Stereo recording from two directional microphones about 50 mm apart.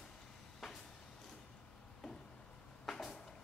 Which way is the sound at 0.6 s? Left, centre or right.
Centre.